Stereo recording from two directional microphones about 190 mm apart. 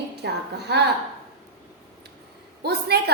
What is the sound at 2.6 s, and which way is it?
Speech, 60° right (ahead or behind).